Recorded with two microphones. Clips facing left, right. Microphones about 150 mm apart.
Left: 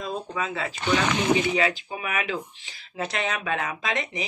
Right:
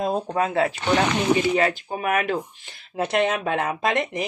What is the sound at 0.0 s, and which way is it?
Speech, 55° right (ahead or behind).